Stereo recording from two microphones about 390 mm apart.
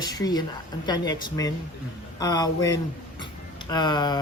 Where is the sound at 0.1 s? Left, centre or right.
Centre.